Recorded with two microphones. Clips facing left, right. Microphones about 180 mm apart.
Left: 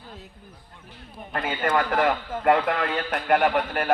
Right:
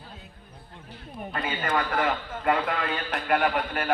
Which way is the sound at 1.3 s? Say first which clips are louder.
Left 4 dB; 50° left (ahead or behind).